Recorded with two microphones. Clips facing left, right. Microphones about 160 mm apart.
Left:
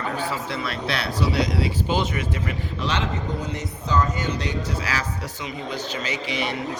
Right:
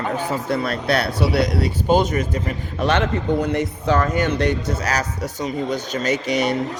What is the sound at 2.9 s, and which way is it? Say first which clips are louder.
A man's voice: right 8 dB; 60° right (ahead or behind).